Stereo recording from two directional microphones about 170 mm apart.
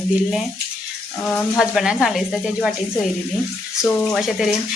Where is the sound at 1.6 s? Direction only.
5° right (ahead or behind).